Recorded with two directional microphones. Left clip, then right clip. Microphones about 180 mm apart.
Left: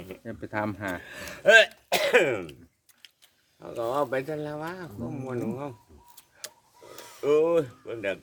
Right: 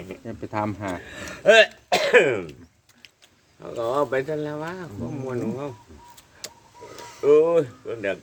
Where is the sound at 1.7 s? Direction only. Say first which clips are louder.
Right 5 dB; 55° left (ahead or behind).